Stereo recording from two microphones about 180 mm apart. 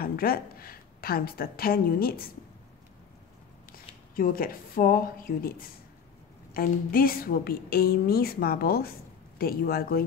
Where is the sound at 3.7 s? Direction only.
50° left (ahead or behind).